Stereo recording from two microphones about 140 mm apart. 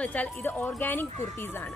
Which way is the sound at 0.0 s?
10° left (ahead or behind).